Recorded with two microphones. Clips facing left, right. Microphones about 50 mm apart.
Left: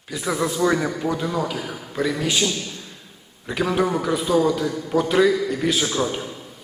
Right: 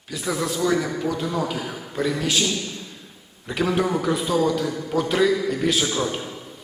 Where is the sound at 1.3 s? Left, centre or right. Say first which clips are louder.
Even; centre.